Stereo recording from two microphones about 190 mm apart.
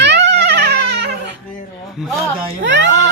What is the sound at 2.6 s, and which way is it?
Speech, 70° right (ahead or behind).